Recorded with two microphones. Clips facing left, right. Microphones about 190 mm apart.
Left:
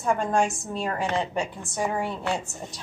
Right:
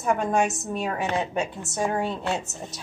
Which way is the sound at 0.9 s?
20° right (ahead or behind).